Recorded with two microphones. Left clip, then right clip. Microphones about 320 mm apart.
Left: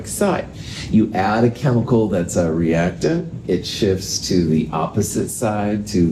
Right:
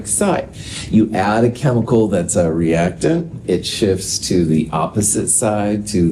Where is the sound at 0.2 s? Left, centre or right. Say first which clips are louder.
Right 1 dB; right.